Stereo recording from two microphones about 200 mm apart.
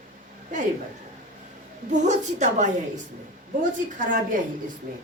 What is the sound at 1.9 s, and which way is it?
Speech, 35° right (ahead or behind).